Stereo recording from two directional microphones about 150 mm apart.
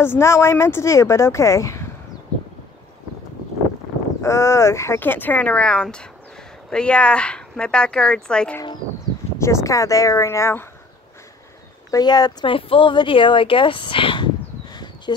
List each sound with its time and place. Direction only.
0.0 s speech: 15° left (ahead or behind)
4.2 s speech: 20° left (ahead or behind)
9.4 s speech: 20° left (ahead or behind)
11.9 s speech: 25° left (ahead or behind)